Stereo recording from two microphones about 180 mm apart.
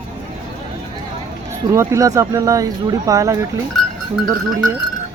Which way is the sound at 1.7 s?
15° right (ahead or behind).